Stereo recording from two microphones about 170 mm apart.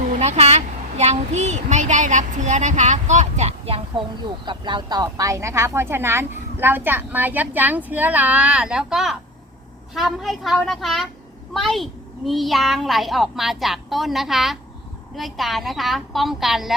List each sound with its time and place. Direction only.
0.1 s a child's voice: 40° right (ahead or behind); by 16.7 s centre (ahead or behind)